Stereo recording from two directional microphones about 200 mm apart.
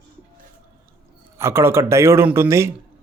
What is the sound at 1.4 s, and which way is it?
Speech, 10° right (ahead or behind).